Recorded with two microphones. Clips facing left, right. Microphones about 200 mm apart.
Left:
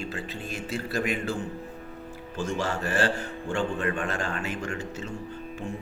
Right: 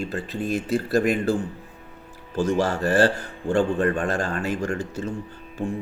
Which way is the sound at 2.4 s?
40° right (ahead or behind).